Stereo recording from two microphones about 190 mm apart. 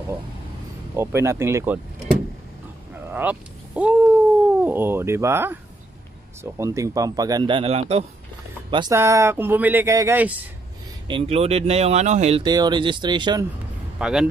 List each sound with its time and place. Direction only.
0.9 s speech: 15° right (ahead or behind)
2.9 s speech: 10° right (ahead or behind); by 8.9 s 25° right (ahead or behind)
8.9 s speech: 15° right (ahead or behind)
11.1 s speech: 30° right (ahead or behind)
12.4 s speech: 20° right (ahead or behind)
13.9 s speech: 5° right (ahead or behind)